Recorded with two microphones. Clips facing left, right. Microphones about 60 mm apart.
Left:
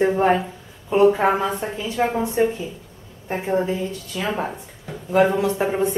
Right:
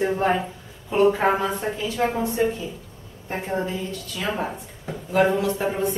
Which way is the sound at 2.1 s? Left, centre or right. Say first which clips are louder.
Left 3 dB; left.